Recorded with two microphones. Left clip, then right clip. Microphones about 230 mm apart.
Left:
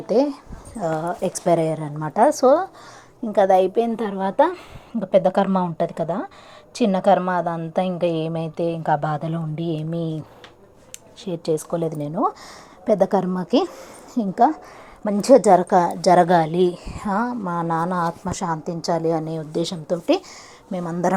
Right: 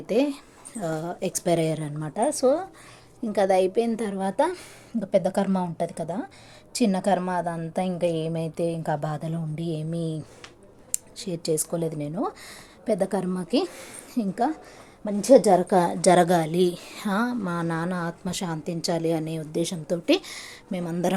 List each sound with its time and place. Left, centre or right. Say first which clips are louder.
0.1 s a woman's voice: left 5 dB; centre
0.8 s a woman's voice: left 6 dB; centre
2.4 s a woman's voice: left 6 dB; centre
11.9 s a woman's voice: left 7 dB; centre
15.4 s a woman's voice: left 5 dB; centre
18.0 s speech: left 7 dB; centre
18.6 s a woman's voice: left 2 dB; centre